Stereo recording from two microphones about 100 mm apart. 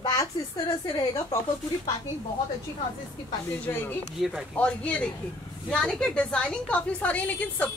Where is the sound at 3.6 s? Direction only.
20° left (ahead or behind).